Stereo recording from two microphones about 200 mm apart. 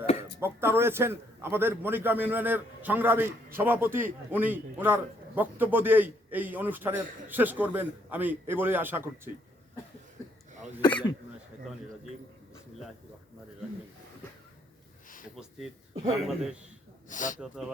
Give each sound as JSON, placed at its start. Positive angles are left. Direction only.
{"t": 0.3, "sound": "a man's voice", "side_deg": -10}
{"t": 16.2, "sound": "a man's voice", "side_deg": 0}
{"t": 17.1, "sound": "speech", "side_deg": 40}
{"t": 17.4, "sound": "a man's voice", "side_deg": 0}